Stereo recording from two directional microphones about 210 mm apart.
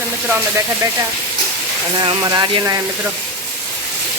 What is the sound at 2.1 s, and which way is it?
Speech, 20° right (ahead or behind).